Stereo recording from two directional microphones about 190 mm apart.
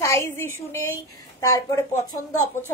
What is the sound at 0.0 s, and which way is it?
A woman's voice, 15° left (ahead or behind).